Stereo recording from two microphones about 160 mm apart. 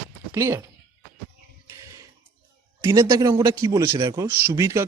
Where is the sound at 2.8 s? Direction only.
20° right (ahead or behind).